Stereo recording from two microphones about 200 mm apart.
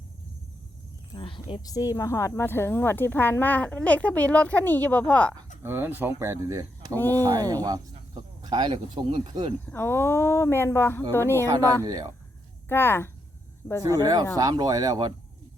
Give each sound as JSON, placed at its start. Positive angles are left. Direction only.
{"t": 1.1, "sound": "speech", "side_deg": 25}
{"t": 5.6, "sound": "speech", "side_deg": -10}
{"t": 9.6, "sound": "speech", "side_deg": 10}
{"t": 11.4, "sound": "speech", "side_deg": -15}
{"t": 12.6, "sound": "speech", "side_deg": 10}
{"t": 13.8, "sound": "speech", "side_deg": -20}